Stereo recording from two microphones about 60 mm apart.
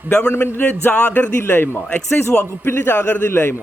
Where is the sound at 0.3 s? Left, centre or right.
Left.